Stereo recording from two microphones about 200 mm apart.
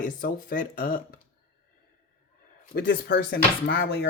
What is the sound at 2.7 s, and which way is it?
Speech, 55° left (ahead or behind).